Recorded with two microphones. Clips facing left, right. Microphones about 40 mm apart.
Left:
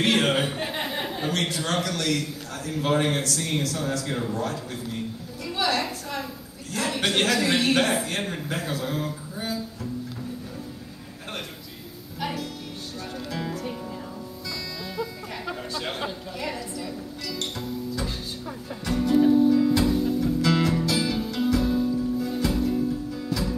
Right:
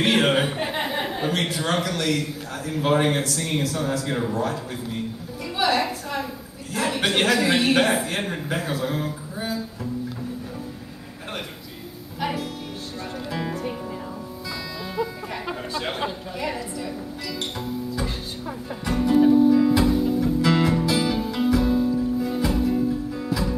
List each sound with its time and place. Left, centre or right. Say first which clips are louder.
0.0 s a man's voice: right 2 dB; centre
5.6 s a sound: right 4 dB; centre
6.7 s a man's voice: right 2 dB; centre
12.2 s music: right 3 dB; centre
15.0 s a sound: right 6 dB; centre
17.4 s music: right 2 dB; centre